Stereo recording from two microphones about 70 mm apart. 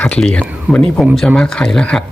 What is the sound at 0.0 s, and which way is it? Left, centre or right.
Speech, centre.